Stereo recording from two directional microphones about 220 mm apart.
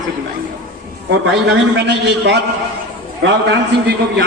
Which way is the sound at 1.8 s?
50° right (ahead or behind).